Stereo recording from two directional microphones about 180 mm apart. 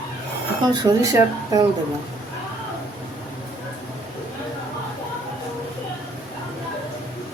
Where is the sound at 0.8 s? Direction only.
20° right (ahead or behind).